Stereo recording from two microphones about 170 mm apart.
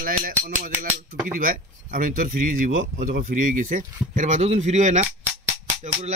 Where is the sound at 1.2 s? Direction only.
55° right (ahead or behind).